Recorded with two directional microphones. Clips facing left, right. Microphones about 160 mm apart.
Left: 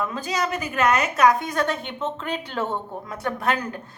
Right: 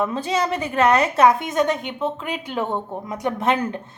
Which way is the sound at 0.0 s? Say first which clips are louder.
Right 4 dB; 30° right (ahead or behind).